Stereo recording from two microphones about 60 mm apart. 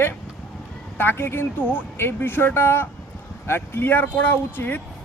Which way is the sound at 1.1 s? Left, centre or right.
Left.